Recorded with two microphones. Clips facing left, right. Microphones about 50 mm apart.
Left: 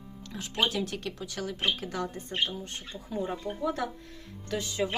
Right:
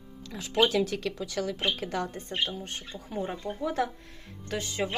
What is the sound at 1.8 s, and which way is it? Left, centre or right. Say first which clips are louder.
Speech: right 2 dB; right.